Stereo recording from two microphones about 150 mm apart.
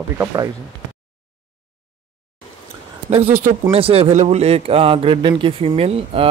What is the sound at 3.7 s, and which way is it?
A man's voice, 40° right (ahead or behind).